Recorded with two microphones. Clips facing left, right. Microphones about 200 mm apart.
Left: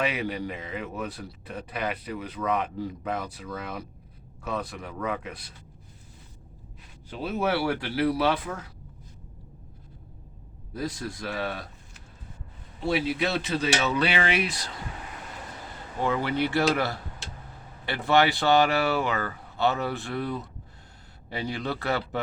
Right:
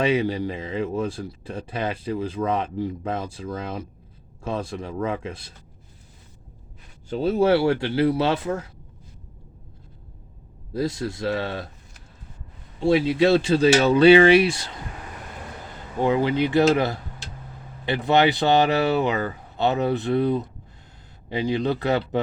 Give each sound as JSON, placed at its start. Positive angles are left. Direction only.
{"t": 0.0, "sound": "a man's voice", "side_deg": -25}
{"t": 7.1, "sound": "a man's voice", "side_deg": -30}
{"t": 10.8, "sound": "a man's voice", "side_deg": -25}
{"t": 12.8, "sound": "a man's voice", "side_deg": -25}
{"t": 16.0, "sound": "a man's voice", "side_deg": -15}